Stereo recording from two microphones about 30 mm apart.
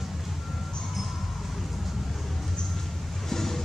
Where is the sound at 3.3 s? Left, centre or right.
Centre.